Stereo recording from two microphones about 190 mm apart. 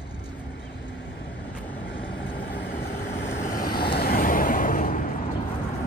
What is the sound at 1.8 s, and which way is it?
Vehicle, 70° left (ahead or behind).